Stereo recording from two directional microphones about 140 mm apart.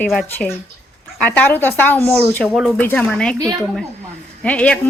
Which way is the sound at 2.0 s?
Centre (ahead or behind).